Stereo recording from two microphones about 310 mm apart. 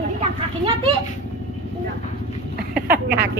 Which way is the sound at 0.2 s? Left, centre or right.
Centre.